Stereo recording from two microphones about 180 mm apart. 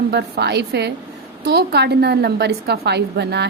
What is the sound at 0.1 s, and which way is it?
A woman's voice, 65° right (ahead or behind).